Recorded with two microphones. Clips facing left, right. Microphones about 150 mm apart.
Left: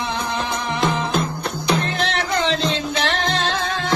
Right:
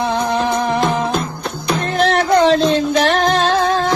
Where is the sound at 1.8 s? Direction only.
45° right (ahead or behind).